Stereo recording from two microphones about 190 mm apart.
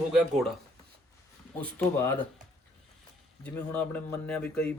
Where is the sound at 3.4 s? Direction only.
5° left (ahead or behind).